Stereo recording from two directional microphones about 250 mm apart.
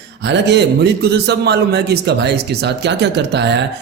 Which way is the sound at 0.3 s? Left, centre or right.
Right.